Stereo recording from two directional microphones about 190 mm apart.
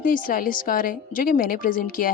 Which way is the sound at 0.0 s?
50° left (ahead or behind).